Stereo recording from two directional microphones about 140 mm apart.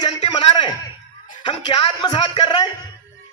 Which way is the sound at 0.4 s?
35° left (ahead or behind).